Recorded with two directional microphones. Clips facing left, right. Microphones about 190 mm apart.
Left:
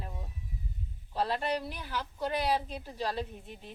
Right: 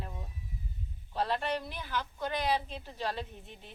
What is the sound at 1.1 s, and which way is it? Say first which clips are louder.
Speech: left 1 dB; 35° left (ahead or behind).